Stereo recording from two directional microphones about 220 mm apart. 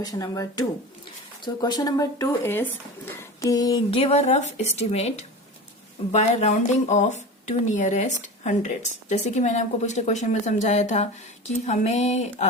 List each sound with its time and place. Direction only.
0.0 s speech: 15° left (ahead or behind)
1.6 s speech: 15° left (ahead or behind)